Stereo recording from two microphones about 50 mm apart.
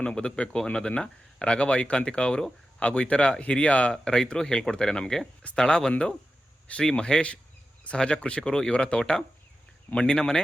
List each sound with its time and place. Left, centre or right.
0.0 s speech: centre
3.9 s speech: centre